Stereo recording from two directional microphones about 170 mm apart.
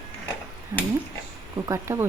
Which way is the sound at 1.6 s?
15° right (ahead or behind).